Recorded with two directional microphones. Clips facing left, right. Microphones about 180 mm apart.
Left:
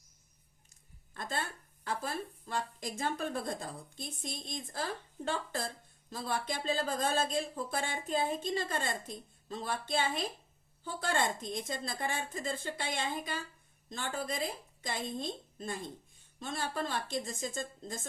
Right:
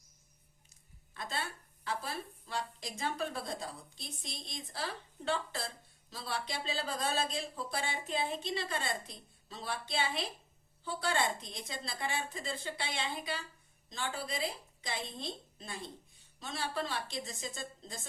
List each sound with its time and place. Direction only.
1.1 s speech: 50° left (ahead or behind)